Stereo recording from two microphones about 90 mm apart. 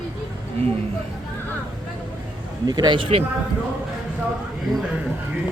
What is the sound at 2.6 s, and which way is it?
Speech, 50° right (ahead or behind).